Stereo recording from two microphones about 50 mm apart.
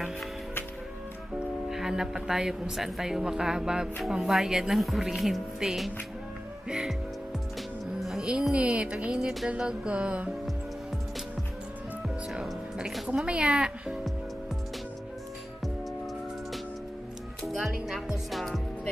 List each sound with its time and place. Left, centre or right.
1.7 s speech: centre
5.6 s speech: centre
8.0 s speech: centre
8.7 s music: right
13.1 s music: right
17.6 s speech: centre